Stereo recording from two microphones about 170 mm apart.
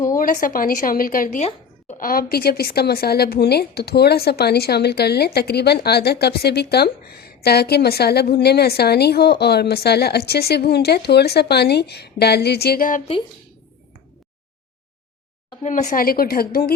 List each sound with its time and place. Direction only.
0.1 s a woman's voice: 50° left (ahead or behind)
1.4 s a sound: 40° left (ahead or behind)
2.0 s speech: 60° left (ahead or behind)
15.6 s a woman's voice: 45° left (ahead or behind); by 16.7 s 60° left (ahead or behind)